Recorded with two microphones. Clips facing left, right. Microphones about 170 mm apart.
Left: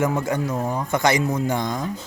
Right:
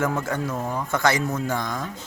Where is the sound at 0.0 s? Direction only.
15° left (ahead or behind).